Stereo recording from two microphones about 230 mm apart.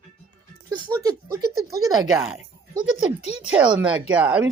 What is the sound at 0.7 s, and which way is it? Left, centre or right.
Speech, centre.